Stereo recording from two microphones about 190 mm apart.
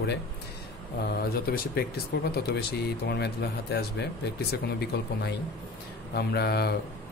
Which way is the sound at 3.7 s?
60° left (ahead or behind).